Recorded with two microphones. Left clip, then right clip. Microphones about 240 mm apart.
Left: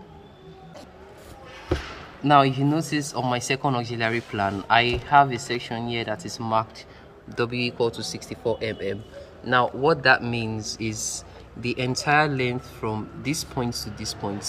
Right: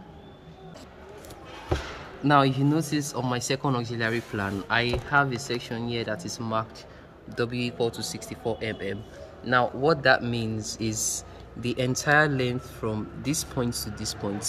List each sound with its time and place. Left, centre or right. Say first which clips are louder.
2.2 s speech: left 3 dB; centre